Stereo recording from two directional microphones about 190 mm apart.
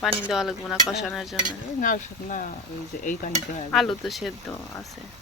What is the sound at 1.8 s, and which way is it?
Speech, 45° left (ahead or behind).